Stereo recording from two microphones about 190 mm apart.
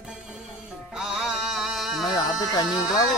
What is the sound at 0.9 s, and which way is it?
Music, 5° right (ahead or behind).